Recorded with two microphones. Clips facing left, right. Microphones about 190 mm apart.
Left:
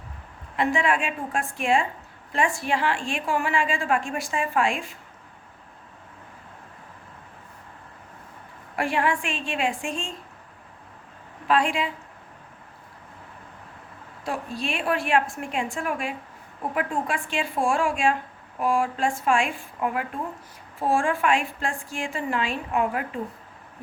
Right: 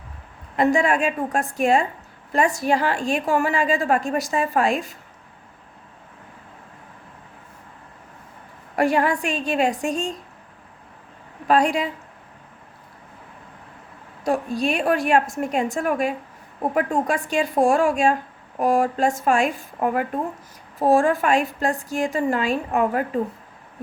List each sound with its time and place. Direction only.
0.5 s a woman's voice: 40° right (ahead or behind)
8.7 s a woman's voice: 40° right (ahead or behind)
11.4 s a woman's voice: 40° right (ahead or behind)
14.3 s a woman's voice: 40° right (ahead or behind)